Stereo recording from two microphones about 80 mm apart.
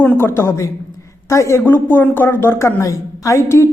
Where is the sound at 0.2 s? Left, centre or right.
Left.